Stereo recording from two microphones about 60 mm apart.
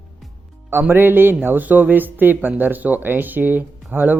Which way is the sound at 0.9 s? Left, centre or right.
Right.